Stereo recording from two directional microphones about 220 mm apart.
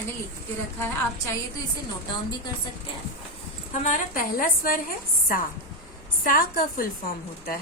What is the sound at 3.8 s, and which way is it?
A woman's voice, 35° left (ahead or behind).